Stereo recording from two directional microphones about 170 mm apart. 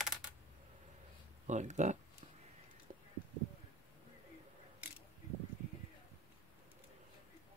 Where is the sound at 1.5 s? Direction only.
45° right (ahead or behind).